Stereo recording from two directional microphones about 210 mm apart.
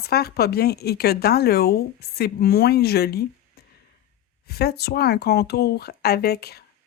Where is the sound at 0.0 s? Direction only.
50° left (ahead or behind).